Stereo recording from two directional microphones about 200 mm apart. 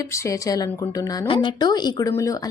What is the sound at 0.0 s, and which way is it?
A woman's voice, 15° left (ahead or behind).